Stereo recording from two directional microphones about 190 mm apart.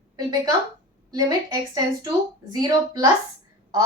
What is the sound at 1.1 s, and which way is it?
A woman's voice, 20° right (ahead or behind).